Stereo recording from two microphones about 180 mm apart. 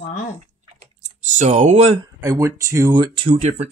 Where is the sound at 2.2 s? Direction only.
15° right (ahead or behind).